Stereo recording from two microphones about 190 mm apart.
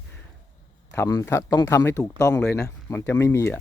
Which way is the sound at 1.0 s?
15° left (ahead or behind).